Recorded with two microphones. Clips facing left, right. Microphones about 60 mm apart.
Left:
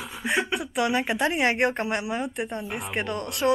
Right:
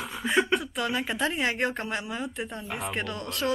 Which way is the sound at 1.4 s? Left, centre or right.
Left.